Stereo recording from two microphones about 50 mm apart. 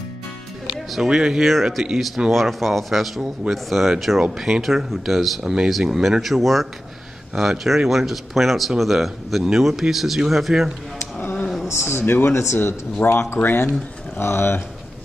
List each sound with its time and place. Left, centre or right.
0.9 s speech: centre
6.2 s speech: centre
11.7 s speech: left
13.0 s speech: left